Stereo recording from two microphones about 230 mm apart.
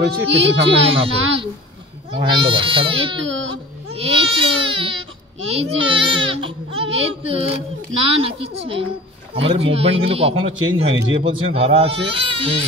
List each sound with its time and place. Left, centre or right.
0.0 s a child's voice: right
0.7 s speech: right
3.2 s speech: right
3.9 s speech: right